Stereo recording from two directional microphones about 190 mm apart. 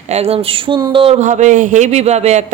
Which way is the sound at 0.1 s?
30° right (ahead or behind).